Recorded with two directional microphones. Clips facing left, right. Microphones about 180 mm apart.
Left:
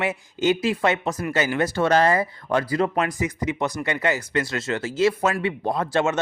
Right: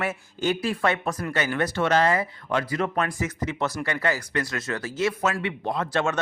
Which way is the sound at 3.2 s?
15° left (ahead or behind).